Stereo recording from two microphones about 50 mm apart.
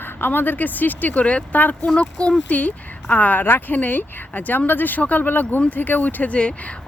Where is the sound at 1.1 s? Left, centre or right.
Left.